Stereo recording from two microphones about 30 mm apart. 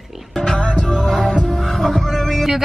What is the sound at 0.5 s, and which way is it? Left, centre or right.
Music, left.